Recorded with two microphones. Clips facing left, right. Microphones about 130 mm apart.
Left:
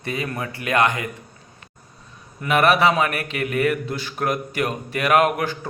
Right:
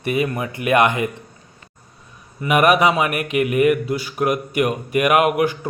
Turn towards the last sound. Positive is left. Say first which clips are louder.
# right 2 dB
turn(degrees=-10)  # may be behind; listen again after turning